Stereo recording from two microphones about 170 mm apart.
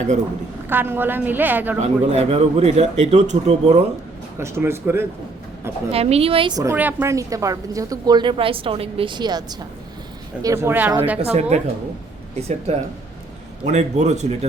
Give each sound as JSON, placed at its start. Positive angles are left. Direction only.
{"t": 0.7, "sound": "a woman's voice", "side_deg": -10}
{"t": 1.8, "sound": "speech", "side_deg": -40}
{"t": 4.4, "sound": "a woman's voice", "side_deg": -15}
{"t": 5.9, "sound": "speech", "side_deg": -35}
{"t": 6.6, "sound": "a woman's voice", "side_deg": -15}
{"t": 11.2, "sound": "speech", "side_deg": -40}